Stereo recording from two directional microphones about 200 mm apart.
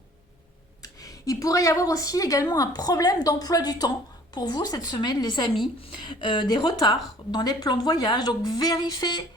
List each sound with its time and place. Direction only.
0.8 s a woman's voice: 15° left (ahead or behind)